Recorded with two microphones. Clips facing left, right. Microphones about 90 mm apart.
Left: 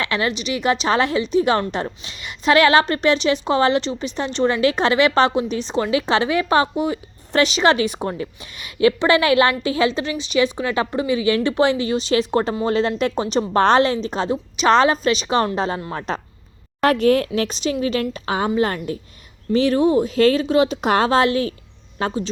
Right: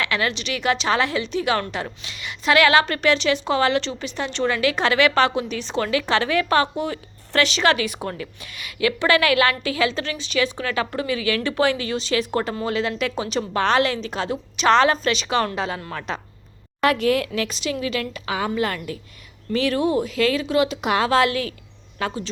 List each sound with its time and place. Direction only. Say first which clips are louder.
0.0 s a woman's voice: left 2 dB; 25° left (ahead or behind)
21.1 s a woman's voice: left 2 dB; 25° left (ahead or behind)